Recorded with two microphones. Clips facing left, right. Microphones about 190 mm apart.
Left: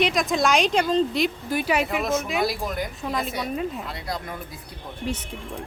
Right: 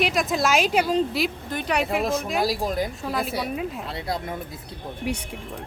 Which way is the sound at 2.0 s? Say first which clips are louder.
Even; 35° right (ahead or behind).